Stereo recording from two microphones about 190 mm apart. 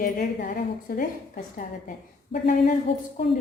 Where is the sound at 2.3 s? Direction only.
50° left (ahead or behind).